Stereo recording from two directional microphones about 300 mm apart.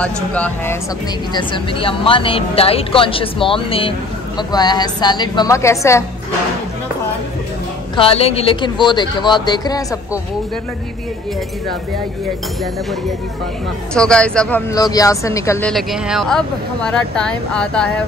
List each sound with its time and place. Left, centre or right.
0.0 s speech: centre
1.3 s speech: centre
7.9 s speech: centre
13.9 s speech: centre